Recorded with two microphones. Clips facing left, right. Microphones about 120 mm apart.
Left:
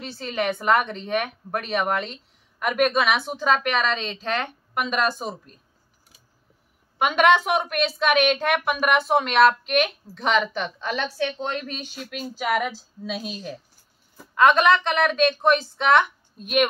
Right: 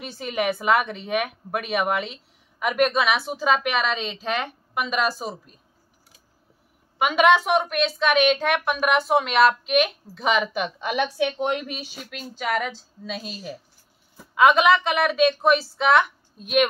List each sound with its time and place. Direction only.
0.0 s a woman's voice: 10° right (ahead or behind)
7.0 s a woman's voice: centre (ahead or behind)